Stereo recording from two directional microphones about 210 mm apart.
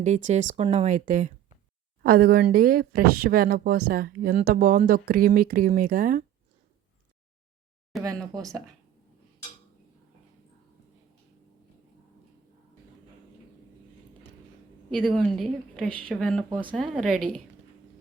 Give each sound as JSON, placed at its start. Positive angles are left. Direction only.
{"t": 0.0, "sound": "speech", "side_deg": -35}
{"t": 8.0, "sound": "speech", "side_deg": -15}
{"t": 14.8, "sound": "a woman's voice", "side_deg": 5}
{"t": 16.5, "sound": "speech", "side_deg": -25}
{"t": 16.7, "sound": "a woman's voice", "side_deg": 0}